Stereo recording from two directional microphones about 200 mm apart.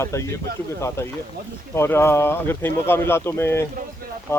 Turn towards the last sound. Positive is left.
turn(degrees=10)  # may be behind; listen again after turning